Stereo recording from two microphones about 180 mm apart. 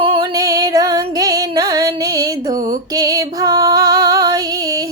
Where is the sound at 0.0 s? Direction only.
25° right (ahead or behind).